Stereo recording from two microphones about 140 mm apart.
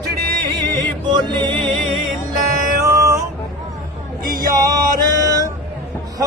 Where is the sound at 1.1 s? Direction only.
30° right (ahead or behind).